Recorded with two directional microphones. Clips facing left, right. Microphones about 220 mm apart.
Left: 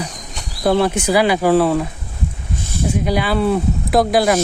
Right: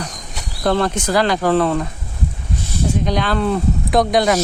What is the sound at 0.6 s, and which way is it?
Speech, 10° left (ahead or behind).